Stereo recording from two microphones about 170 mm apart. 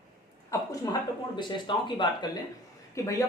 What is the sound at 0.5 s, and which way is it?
Speech, 20° left (ahead or behind).